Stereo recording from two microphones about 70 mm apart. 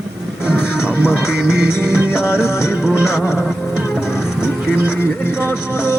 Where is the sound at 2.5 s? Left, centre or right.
Left.